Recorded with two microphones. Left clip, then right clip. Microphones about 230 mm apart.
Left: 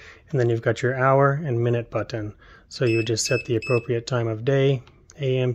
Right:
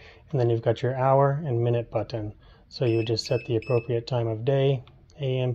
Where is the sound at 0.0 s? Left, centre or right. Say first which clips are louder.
Left 3 dB; left.